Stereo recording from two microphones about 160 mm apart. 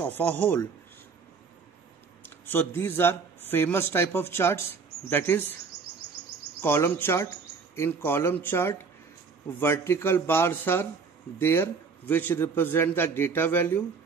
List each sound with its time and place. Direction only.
0.2 s a man's voice: 10° left (ahead or behind)
2.2 s a man's voice: 15° left (ahead or behind)
6.6 s a man's voice: 15° left (ahead or behind)